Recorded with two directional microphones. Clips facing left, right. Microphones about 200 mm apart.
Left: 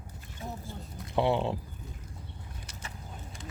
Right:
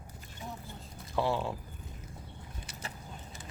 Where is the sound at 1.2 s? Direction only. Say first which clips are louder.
Left 4 dB; 20° left (ahead or behind).